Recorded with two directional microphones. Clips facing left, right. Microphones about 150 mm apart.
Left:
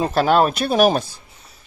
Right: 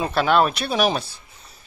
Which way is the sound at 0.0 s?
40° left (ahead or behind).